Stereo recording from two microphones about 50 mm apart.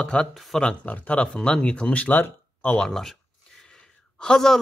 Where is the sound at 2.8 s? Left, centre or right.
Centre.